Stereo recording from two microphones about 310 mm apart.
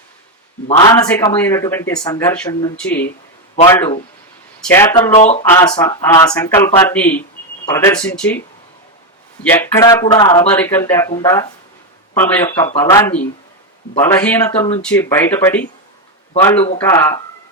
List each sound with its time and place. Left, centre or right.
0.7 s speech: centre
3.5 s a man's voice: centre
5.1 s speech: left; by 8.4 s centre
9.4 s a man's voice: centre